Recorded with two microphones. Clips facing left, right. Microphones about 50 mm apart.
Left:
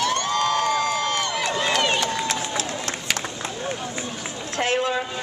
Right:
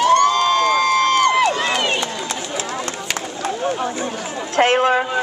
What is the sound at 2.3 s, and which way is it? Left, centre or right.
Run, centre.